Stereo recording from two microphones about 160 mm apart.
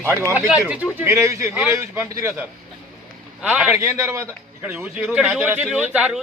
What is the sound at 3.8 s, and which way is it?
A man's voice, 20° right (ahead or behind).